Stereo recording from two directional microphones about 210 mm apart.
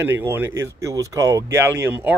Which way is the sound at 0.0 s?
10° right (ahead or behind).